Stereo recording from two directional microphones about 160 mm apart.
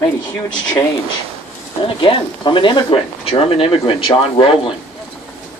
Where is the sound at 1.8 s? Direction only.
30° left (ahead or behind).